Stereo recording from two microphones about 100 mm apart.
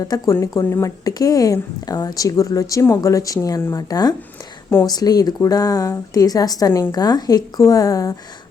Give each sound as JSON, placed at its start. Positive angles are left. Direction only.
{"t": 0.0, "sound": "speech", "side_deg": 35}